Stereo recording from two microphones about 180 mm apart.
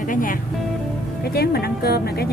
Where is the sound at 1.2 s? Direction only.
60° left (ahead or behind).